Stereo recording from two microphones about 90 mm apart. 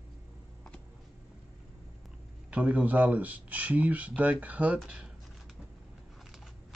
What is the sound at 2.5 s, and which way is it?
Speech, 15° right (ahead or behind).